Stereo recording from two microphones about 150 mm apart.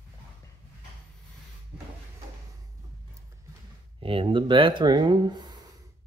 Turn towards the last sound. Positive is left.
turn(degrees=-30)  # may be behind; listen again after turning